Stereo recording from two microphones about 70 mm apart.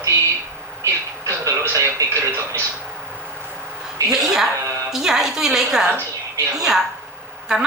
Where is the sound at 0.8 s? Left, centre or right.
Right.